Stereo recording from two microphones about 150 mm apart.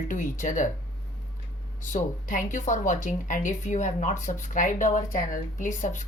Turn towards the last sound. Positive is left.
turn(degrees=60)  # may be behind; listen again after turning